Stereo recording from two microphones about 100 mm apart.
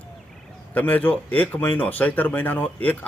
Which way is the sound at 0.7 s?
15° left (ahead or behind).